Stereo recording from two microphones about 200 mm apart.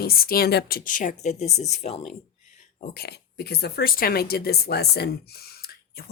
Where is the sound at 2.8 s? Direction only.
50° left (ahead or behind).